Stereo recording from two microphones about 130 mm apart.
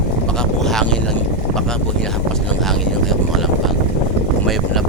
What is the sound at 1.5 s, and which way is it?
Speech, 5° left (ahead or behind).